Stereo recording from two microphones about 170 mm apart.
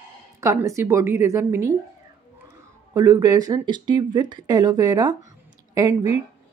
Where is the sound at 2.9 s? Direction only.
20° right (ahead or behind).